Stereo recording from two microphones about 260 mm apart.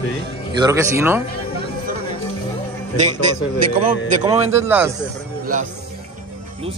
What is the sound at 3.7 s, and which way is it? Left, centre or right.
Speech, right.